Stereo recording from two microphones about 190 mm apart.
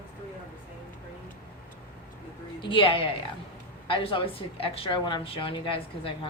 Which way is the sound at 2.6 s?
25° left (ahead or behind).